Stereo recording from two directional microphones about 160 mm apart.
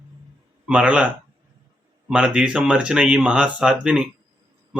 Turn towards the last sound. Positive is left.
turn(degrees=-5)  # may be behind; listen again after turning